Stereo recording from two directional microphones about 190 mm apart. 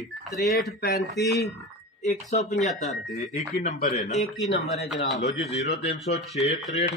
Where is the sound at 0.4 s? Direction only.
55° left (ahead or behind).